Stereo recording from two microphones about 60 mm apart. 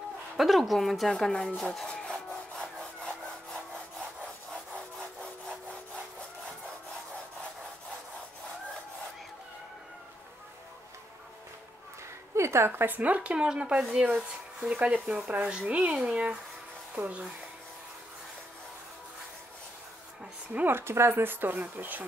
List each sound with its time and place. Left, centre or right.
0.4 s speech: centre
1.1 s speech: centre
1.9 s wood: centre
12.4 s speech: right
20.6 s speech: right